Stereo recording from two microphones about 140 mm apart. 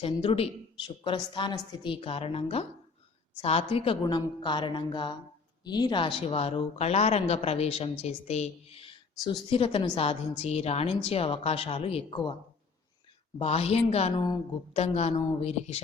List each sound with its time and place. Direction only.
0.0 s speech: 45° left (ahead or behind)
4.0 s speech: 35° left (ahead or behind)
13.4 s speech: 45° left (ahead or behind)